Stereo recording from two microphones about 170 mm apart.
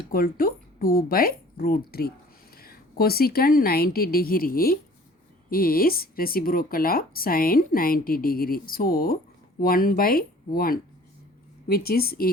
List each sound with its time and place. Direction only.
0.1 s speech: 55° left (ahead or behind)